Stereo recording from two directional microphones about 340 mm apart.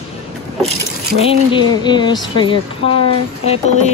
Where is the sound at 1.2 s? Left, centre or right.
Centre.